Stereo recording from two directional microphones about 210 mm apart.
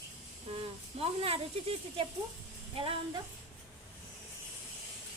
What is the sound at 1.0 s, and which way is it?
Speech, 25° right (ahead or behind).